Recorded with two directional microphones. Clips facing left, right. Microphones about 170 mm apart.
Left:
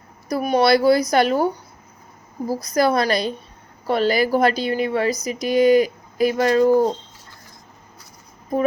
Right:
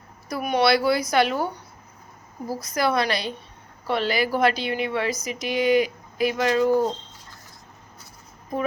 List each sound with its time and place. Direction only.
0.3 s speech: 40° left (ahead or behind)
2.5 s speech: 40° left (ahead or behind)